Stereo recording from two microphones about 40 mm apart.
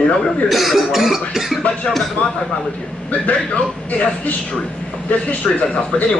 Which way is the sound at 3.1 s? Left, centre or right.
Left.